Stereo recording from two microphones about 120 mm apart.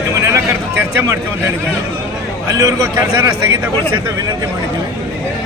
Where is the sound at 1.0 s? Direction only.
20° right (ahead or behind).